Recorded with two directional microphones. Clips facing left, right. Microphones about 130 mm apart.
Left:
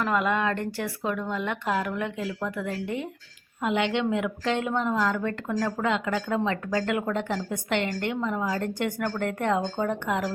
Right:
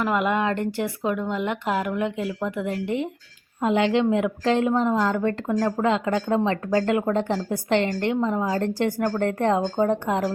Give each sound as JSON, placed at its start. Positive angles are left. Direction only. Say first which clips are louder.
{"t": 0.0, "sound": "speech", "louder": "right 2 dB", "side_deg": -20}